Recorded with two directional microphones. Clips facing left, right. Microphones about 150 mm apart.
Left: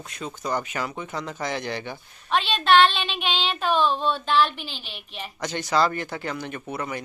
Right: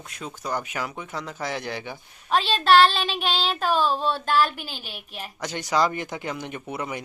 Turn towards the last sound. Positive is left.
turn(degrees=-15)  # may be behind; listen again after turning